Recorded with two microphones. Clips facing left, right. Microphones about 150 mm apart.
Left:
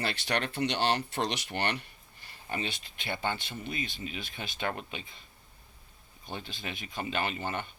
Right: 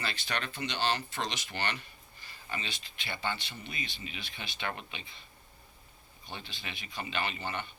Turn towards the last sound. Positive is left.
turn(degrees=45)  # may be behind; listen again after turning